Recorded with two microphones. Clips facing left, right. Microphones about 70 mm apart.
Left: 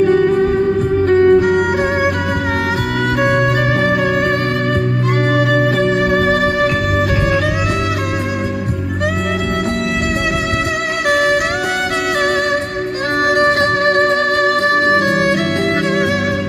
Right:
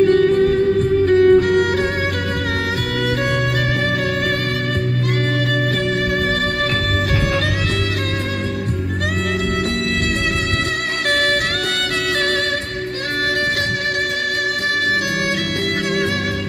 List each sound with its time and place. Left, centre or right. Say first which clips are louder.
0.0 s music: left 1 dB; centre
1.3 s music: left 2 dB; centre
5.5 s music: left 6 dB; left
11.1 s music: left 4 dB; centre
13.4 s music: left 7 dB; left